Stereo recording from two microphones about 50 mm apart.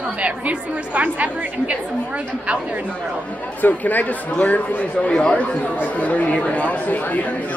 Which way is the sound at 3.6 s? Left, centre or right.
Left.